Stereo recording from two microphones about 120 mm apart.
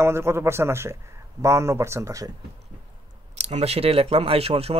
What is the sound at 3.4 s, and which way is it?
Speech, 65° right (ahead or behind).